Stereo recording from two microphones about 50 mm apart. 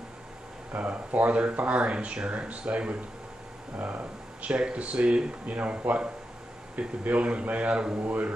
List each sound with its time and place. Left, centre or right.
0.7 s speech: right
7.1 s speech: right